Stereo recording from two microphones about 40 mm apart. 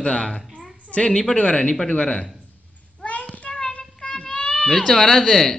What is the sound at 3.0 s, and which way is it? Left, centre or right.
Child singing, left.